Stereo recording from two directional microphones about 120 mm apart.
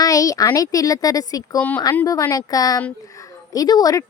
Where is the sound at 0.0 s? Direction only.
30° left (ahead or behind).